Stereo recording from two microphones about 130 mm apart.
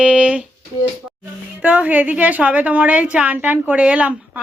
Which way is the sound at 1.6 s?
10° right (ahead or behind).